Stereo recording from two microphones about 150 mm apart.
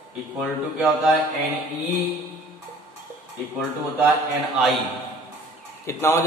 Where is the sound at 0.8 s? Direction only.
Centre (ahead or behind).